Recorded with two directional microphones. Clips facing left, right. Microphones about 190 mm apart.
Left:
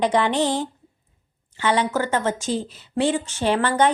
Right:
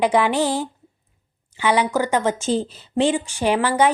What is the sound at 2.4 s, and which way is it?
Speech, 30° right (ahead or behind).